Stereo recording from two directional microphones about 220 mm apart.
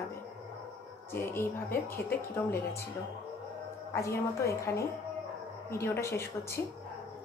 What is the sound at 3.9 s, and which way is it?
A woman's voice, 15° left (ahead or behind).